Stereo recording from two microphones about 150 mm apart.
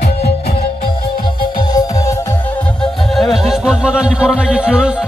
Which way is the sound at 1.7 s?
25° left (ahead or behind).